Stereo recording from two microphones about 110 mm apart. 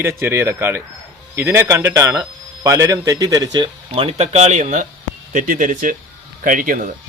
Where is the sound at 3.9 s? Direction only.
65° right (ahead or behind); by 4.8 s 90° right.